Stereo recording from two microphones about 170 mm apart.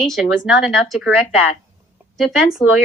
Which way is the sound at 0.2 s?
Centre (ahead or behind).